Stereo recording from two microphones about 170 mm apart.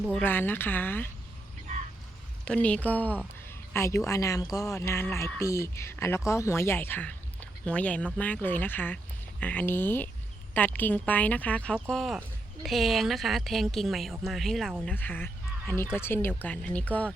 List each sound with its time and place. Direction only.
0.1 s speech: 10° left (ahead or behind)
2.4 s a woman's voice: 5° left (ahead or behind)